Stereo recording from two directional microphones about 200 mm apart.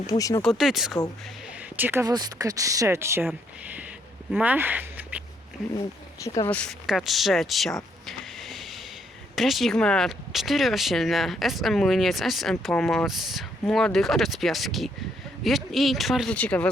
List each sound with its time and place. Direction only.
0.1 s speech: 15° left (ahead or behind)
0.4 s speech: centre (ahead or behind)
6.2 s speech: 15° left (ahead or behind)
8.0 s a sound: centre (ahead or behind)
9.3 s speech: centre (ahead or behind)